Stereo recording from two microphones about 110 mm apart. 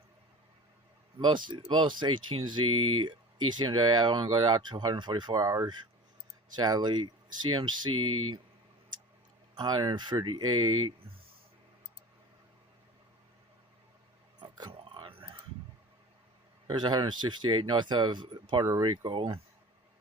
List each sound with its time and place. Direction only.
1.2 s speech: 45° right (ahead or behind)
9.6 s speech: 40° right (ahead or behind)
14.3 s a sound: 40° right (ahead or behind)
14.7 s a sound: 55° right (ahead or behind)
16.6 s speech: 40° right (ahead or behind)
18.6 s speech: 30° right (ahead or behind)
18.9 s speech: 50° right (ahead or behind)